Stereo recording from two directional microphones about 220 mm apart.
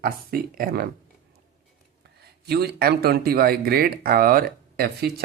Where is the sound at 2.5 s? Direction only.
45° right (ahead or behind).